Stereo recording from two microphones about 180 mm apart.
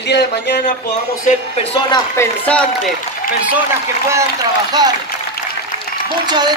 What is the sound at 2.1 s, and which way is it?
Speech, 10° left (ahead or behind).